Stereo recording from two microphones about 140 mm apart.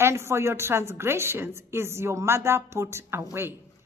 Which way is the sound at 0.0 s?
20° right (ahead or behind).